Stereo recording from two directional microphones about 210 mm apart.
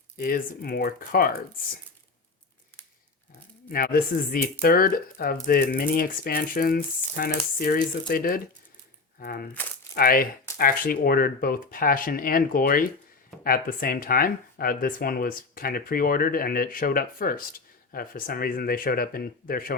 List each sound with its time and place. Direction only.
0.2 s speech: 40° left (ahead or behind)
3.7 s speech: 45° left (ahead or behind)